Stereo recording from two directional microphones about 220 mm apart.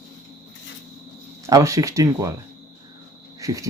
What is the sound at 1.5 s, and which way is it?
Speech, 15° right (ahead or behind).